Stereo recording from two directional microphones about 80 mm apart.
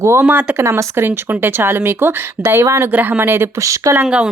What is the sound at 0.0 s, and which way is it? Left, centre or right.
Speech, right.